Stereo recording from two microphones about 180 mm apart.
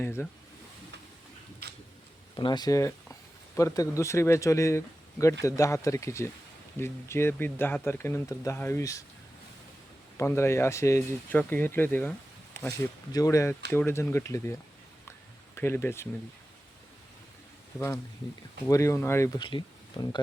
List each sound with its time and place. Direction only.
0.0 s speech: 10° left (ahead or behind)
2.3 s speech: 25° left (ahead or behind)
10.2 s speech: 15° left (ahead or behind)
15.5 s speech: 15° left (ahead or behind)
17.7 s speech: 15° left (ahead or behind)
19.4 s speech: 25° left (ahead or behind)